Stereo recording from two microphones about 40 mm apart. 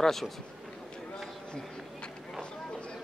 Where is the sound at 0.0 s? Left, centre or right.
Centre.